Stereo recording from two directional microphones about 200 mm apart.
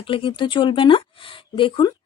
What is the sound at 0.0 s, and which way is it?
Speech, 25° left (ahead or behind).